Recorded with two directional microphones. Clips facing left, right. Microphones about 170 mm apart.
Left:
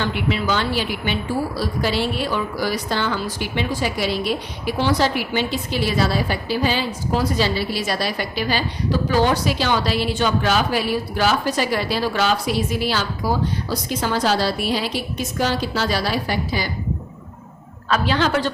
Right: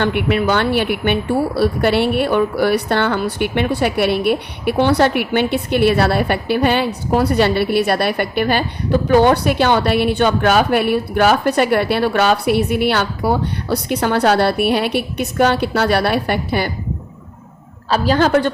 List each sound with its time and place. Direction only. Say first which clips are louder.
0.0 s a woman's voice: right 6 dB; 60° right (ahead or behind)
17.8 s a woman's voice: right 5 dB; 35° right (ahead or behind)